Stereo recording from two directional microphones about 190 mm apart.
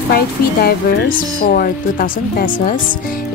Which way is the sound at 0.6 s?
55° left (ahead or behind).